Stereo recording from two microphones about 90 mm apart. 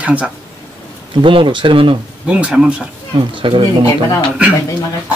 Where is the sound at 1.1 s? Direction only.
70° right (ahead or behind).